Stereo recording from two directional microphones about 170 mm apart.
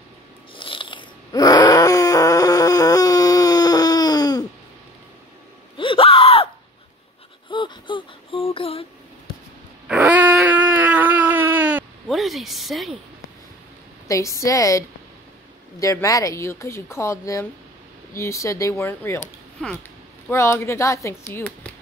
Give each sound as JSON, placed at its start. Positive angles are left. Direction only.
{"t": 0.6, "sound": "groan", "side_deg": 30}
{"t": 5.8, "sound": "gasp", "side_deg": 30}
{"t": 7.4, "sound": "a sound", "side_deg": 30}
{"t": 9.8, "sound": "dog", "side_deg": -10}
{"t": 14.0, "sound": "a woman's voice", "side_deg": 20}
{"t": 19.6, "sound": "a sound", "side_deg": 5}
{"t": 20.2, "sound": "speech", "side_deg": 15}